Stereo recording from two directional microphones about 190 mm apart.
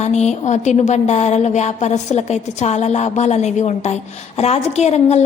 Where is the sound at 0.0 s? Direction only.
35° left (ahead or behind).